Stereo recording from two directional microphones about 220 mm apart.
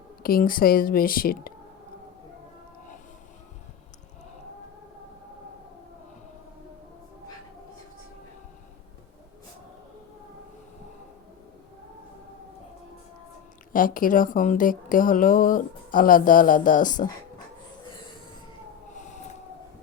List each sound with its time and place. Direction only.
0.2 s speech: 40° left (ahead or behind)
13.7 s speech: 40° left (ahead or behind)
18.9 s siren: 35° left (ahead or behind)